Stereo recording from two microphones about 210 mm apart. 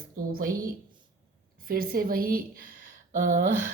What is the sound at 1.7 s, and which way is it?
Speech, 45° right (ahead or behind).